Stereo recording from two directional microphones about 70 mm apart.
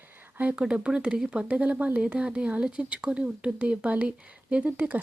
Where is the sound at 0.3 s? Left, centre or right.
Centre.